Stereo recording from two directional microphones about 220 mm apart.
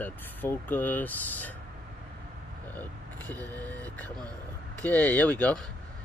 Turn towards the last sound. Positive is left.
turn(degrees=5)  # may be behind; listen again after turning